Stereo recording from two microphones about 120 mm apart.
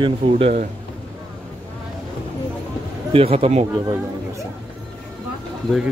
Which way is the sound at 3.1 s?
55° right (ahead or behind).